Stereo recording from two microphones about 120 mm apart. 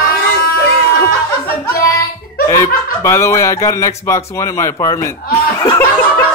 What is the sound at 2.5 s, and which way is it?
Speech, 20° left (ahead or behind).